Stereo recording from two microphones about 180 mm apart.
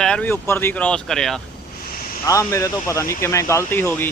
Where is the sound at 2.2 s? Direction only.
15° left (ahead or behind).